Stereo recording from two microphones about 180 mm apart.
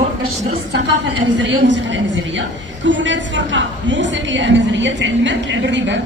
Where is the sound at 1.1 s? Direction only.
90° right.